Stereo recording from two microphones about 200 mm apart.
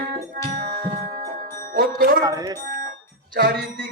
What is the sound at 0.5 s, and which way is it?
Music, 45° right (ahead or behind).